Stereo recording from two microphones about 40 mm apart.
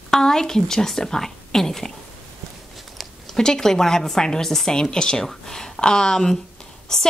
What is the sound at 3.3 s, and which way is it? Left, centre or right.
A woman's voice, centre.